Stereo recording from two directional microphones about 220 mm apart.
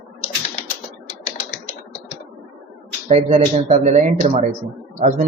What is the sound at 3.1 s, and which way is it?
Speech, 30° right (ahead or behind).